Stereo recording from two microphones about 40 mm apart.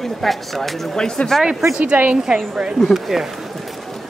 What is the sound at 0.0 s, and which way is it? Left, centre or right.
Speech, centre.